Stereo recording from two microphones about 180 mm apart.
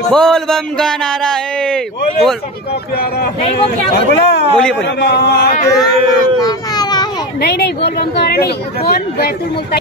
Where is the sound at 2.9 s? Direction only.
60° left (ahead or behind).